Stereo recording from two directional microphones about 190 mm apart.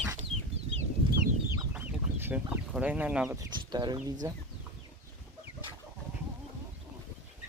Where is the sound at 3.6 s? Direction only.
20° right (ahead or behind).